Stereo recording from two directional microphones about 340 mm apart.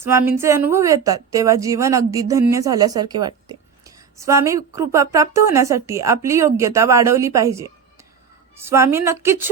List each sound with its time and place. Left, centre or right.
0.0 s a woman's voice: centre